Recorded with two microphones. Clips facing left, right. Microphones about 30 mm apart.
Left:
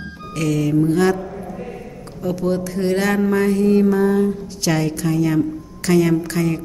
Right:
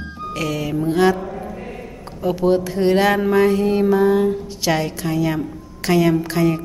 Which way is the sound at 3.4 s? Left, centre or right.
Centre.